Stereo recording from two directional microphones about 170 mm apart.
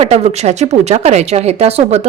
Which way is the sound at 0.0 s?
40° right (ahead or behind).